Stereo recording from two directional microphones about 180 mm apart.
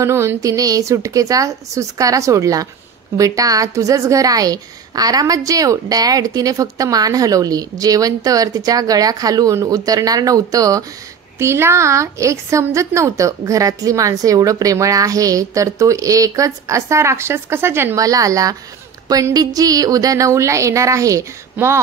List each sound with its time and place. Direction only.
0.0 s a woman's voice: 15° right (ahead or behind)